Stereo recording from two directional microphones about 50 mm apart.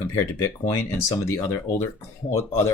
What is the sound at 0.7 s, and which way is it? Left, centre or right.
Speech, left.